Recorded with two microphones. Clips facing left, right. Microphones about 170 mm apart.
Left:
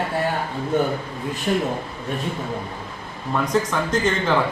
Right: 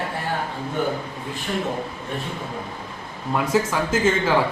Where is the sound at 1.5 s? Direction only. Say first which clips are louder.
Left 5 dB; 40° left (ahead or behind).